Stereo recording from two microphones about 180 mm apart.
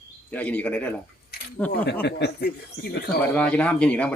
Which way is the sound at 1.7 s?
65° left (ahead or behind).